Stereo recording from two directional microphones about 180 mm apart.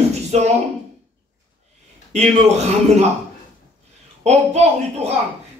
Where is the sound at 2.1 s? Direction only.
40° right (ahead or behind).